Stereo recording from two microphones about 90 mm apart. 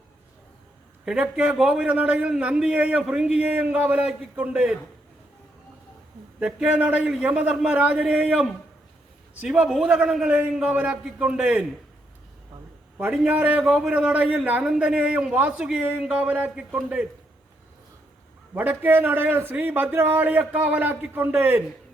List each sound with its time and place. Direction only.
1.0 s a man's voice: 10° right (ahead or behind)
6.4 s a man's voice: 15° right (ahead or behind)
13.1 s a man's voice: 15° right (ahead or behind)
18.5 s a man's voice: 20° right (ahead or behind)